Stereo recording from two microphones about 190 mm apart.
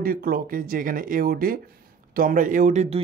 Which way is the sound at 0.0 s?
50° right (ahead or behind).